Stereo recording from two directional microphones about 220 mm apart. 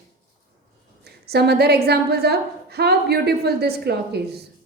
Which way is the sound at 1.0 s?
45° right (ahead or behind).